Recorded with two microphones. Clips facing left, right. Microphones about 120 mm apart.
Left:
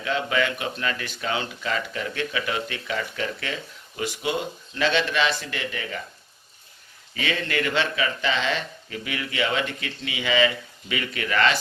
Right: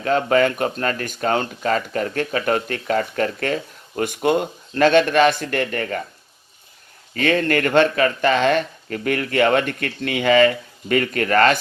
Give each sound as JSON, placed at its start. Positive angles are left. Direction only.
{"t": 0.0, "sound": "speech", "side_deg": -45}
{"t": 7.1, "sound": "speech", "side_deg": -50}